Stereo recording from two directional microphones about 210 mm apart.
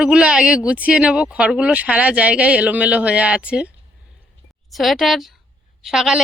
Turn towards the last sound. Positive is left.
turn(degrees=0)  # may be behind; listen again after turning